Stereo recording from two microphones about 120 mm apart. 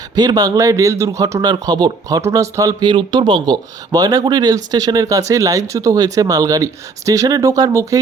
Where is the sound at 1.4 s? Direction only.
35° right (ahead or behind).